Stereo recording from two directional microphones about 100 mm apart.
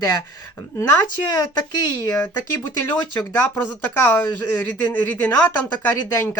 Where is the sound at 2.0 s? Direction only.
25° left (ahead or behind).